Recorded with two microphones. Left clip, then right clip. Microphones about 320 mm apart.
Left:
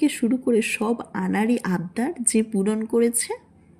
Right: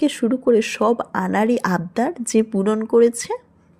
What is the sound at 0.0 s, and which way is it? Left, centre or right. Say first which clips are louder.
Speech: right 4 dB; centre.